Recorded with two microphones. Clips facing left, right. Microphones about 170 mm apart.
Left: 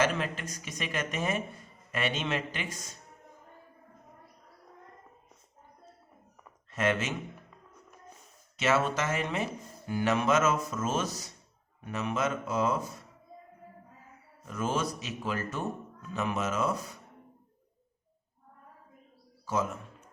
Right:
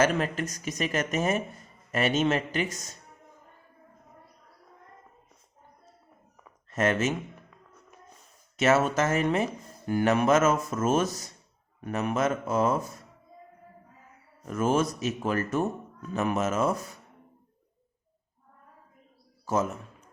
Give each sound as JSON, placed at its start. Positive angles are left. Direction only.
{"t": 0.0, "sound": "speech", "side_deg": -45}
{"t": 6.7, "sound": "speech", "side_deg": -45}
{"t": 8.5, "sound": "speech", "side_deg": -45}
{"t": 14.4, "sound": "speech", "side_deg": -50}